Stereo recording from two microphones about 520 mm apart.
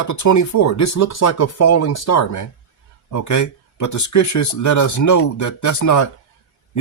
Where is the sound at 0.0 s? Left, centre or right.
Left.